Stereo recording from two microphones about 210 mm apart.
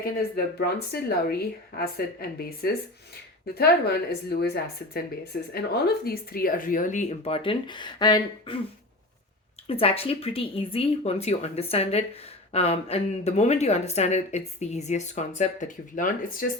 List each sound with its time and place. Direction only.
0.0 s a woman's voice: 45° left (ahead or behind); by 8.5 s 20° left (ahead or behind)
9.6 s a woman's voice: 25° left (ahead or behind)